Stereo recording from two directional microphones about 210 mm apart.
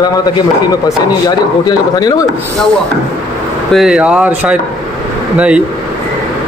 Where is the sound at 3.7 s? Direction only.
5° right (ahead or behind).